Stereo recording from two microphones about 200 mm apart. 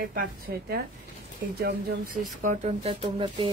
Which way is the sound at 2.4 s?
35° right (ahead or behind).